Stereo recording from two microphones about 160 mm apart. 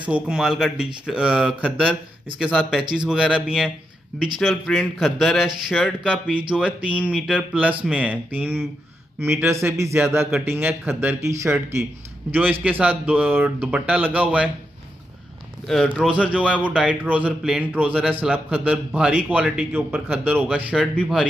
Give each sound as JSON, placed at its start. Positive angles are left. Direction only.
{"t": 0.1, "sound": "a man's voice", "side_deg": -5}
{"t": 15.6, "sound": "a man's voice", "side_deg": 0}
{"t": 20.8, "sound": "speech", "side_deg": 10}